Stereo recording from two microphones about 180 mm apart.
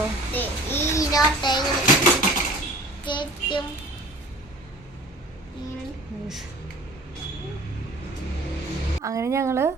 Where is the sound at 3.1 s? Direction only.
25° left (ahead or behind).